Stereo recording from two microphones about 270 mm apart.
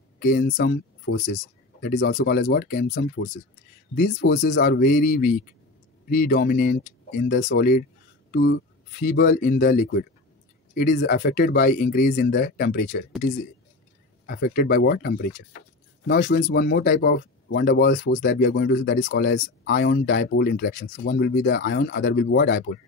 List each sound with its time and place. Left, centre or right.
0.2 s speech: left
14.2 s speech: left